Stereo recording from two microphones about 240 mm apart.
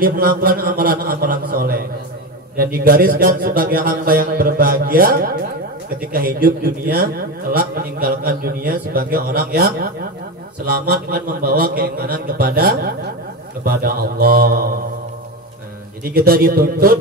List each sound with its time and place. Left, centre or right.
0.0 s a sound: right
2.5 s a man's voice: right
16.0 s a man's voice: right